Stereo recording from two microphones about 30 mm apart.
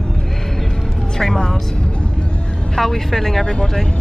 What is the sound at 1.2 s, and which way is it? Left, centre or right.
Speech, centre.